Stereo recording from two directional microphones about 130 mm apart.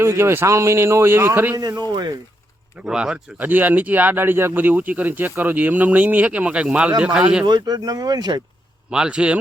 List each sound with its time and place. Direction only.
0.0 s a man's voice: 20° right (ahead or behind)
1.9 s speech: 35° right (ahead or behind)
2.8 s speech: 5° right (ahead or behind)
7.4 s speech: 35° right (ahead or behind)
8.9 s speech: 5° right (ahead or behind)